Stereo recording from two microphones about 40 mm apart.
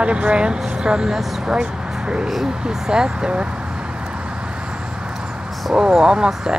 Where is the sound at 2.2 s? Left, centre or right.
Centre.